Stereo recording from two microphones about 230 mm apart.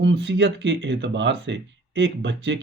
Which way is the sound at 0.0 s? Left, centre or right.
Right.